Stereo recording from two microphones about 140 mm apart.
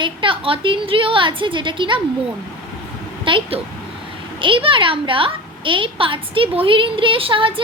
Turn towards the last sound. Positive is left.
turn(degrees=-40)  # may be behind; listen again after turning